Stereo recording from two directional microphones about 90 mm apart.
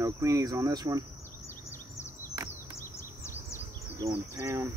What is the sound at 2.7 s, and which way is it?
Insect, 30° left (ahead or behind).